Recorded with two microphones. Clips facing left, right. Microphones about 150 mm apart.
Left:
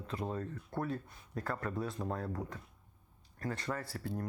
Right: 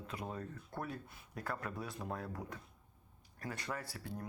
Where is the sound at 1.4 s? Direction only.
5° right (ahead or behind).